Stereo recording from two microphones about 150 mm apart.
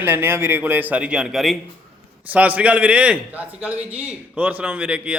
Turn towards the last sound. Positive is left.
turn(degrees=-10)  # may be behind; listen again after turning